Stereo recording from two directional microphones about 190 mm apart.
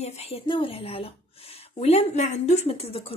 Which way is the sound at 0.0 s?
35° left (ahead or behind).